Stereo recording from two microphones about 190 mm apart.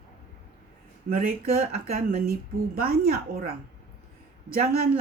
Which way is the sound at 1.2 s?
50° right (ahead or behind).